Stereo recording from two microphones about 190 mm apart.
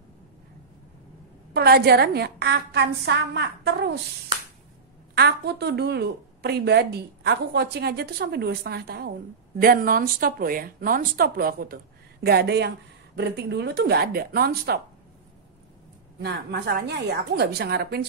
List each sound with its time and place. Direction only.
1.5 s a woman's voice: 55° right (ahead or behind)
5.1 s a woman's voice: 55° right (ahead or behind)
16.2 s a woman's voice: 60° right (ahead or behind)